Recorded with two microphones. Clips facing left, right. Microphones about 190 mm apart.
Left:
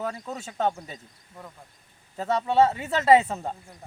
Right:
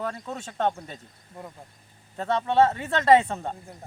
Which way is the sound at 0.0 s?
5° left (ahead or behind).